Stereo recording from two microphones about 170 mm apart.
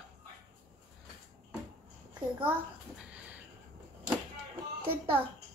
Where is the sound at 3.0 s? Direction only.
10° right (ahead or behind).